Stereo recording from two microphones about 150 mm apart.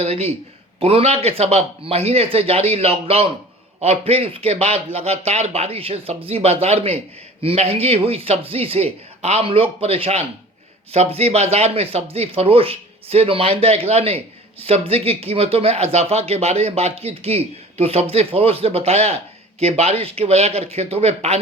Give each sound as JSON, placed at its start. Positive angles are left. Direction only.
{"t": 0.0, "sound": "speech", "side_deg": -45}